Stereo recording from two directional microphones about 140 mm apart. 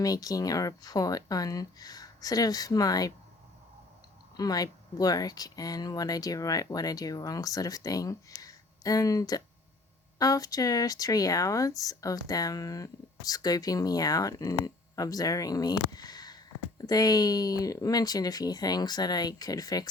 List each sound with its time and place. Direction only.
0.0 s speech: 25° left (ahead or behind)
4.4 s speech: 25° left (ahead or behind)